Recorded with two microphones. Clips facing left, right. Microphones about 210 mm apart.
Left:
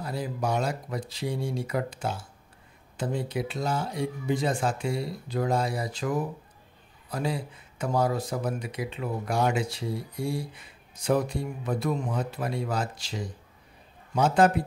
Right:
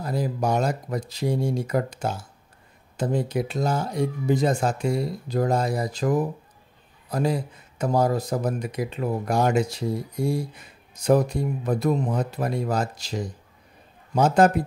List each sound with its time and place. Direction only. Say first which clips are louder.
0.0 s speech: right 5 dB; 40° right (ahead or behind)